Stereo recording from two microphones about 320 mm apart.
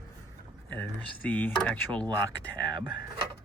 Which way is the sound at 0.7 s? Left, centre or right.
Centre.